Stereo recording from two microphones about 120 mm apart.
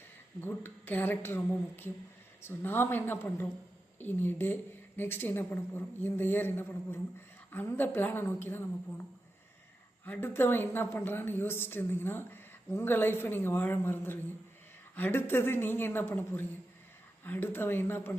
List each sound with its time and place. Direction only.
0.4 s a woman's voice: 15° left (ahead or behind)
10.1 s a woman's voice: 20° left (ahead or behind)